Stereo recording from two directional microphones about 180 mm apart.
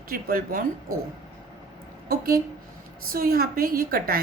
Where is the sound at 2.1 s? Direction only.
55° right (ahead or behind).